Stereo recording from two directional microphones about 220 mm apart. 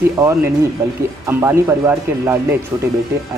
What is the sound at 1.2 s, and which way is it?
Speech, 10° right (ahead or behind).